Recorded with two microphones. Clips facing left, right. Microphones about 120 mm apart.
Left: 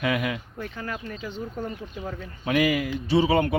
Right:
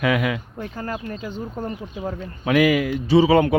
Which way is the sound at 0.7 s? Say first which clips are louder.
Right 7 dB; 40° right (ahead or behind).